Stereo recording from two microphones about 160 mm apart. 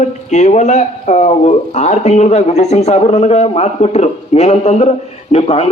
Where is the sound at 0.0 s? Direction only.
45° left (ahead or behind).